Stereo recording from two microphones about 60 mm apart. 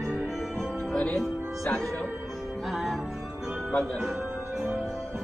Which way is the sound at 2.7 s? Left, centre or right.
Centre.